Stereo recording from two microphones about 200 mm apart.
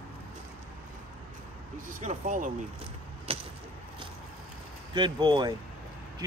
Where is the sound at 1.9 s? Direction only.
40° right (ahead or behind).